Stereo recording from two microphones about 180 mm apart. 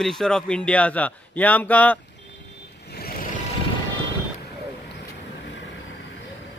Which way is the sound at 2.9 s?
60° left (ahead or behind).